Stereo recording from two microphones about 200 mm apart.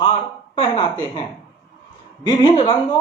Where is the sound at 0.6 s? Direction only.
25° left (ahead or behind).